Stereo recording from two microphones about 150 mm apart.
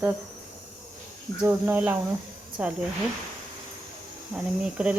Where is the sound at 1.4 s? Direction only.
10° right (ahead or behind).